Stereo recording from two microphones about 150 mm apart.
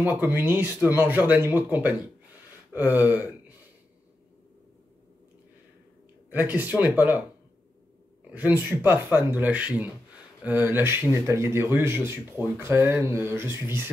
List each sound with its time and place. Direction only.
0.0 s speech: 15° right (ahead or behind)
6.3 s speech: 10° right (ahead or behind)